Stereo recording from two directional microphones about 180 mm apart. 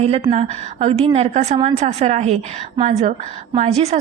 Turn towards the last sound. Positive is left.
turn(degrees=-35)  # may be behind; listen again after turning